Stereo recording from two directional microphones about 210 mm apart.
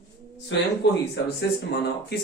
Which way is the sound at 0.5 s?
60° left (ahead or behind).